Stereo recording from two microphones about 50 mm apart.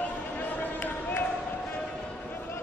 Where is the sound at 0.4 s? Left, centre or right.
Left.